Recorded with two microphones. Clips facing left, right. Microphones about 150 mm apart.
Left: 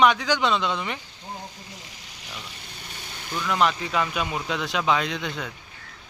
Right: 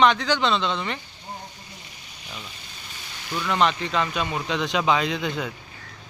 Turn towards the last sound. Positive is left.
turn(degrees=0)  # may be behind; listen again after turning